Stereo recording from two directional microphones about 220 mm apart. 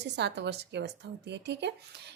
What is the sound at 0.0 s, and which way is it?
A woman's voice, 50° right (ahead or behind).